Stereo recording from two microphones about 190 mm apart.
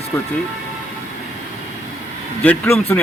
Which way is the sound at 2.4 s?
10° left (ahead or behind).